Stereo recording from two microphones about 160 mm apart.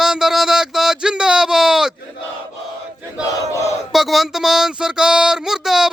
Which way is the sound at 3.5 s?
20° left (ahead or behind).